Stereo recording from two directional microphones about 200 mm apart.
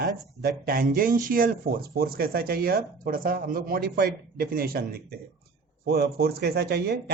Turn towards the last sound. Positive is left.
turn(degrees=-55)  # may be behind; listen again after turning